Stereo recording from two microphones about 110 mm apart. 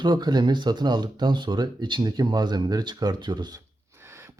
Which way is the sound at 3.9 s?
25° right (ahead or behind).